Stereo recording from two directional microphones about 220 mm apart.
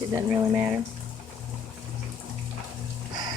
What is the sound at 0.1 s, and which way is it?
Speech, 10° right (ahead or behind).